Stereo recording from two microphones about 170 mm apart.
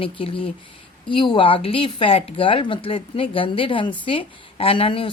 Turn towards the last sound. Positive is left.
turn(degrees=30)  # may be behind; listen again after turning